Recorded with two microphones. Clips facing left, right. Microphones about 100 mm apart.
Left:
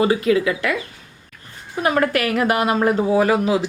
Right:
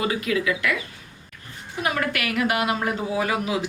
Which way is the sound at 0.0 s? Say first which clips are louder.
Left 7 dB; 30° left (ahead or behind).